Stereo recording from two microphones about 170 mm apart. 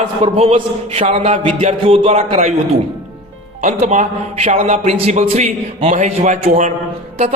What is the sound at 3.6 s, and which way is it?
A man's voice, 40° right (ahead or behind).